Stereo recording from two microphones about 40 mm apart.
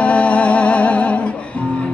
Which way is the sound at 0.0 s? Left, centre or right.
Left.